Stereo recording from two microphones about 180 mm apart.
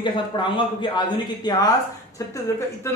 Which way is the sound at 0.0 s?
25° left (ahead or behind).